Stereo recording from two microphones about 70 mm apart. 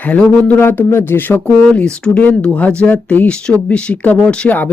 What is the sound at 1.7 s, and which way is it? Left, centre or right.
Speech, centre.